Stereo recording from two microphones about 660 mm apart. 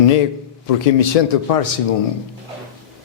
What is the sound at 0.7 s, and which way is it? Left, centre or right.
Speech, left.